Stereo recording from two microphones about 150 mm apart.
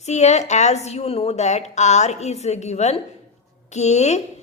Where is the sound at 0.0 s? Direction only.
50° left (ahead or behind).